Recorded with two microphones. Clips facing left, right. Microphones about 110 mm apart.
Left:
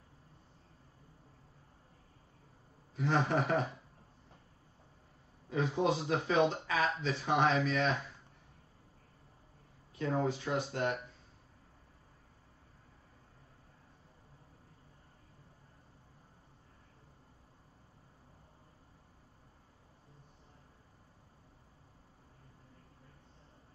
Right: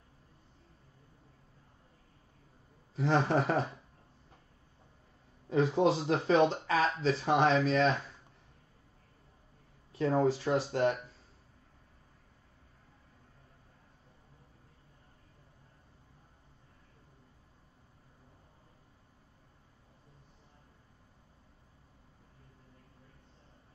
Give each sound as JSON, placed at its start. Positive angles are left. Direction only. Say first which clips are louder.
{"t": 3.0, "sound": "speech", "louder": "right 3 dB", "side_deg": -30}
{"t": 5.5, "sound": "speech", "louder": "right 5 dB", "side_deg": -35}
{"t": 9.9, "sound": "speech", "louder": "right 5 dB", "side_deg": -35}